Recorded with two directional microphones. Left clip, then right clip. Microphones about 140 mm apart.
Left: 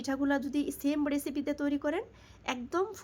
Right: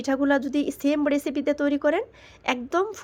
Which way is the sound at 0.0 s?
15° right (ahead or behind).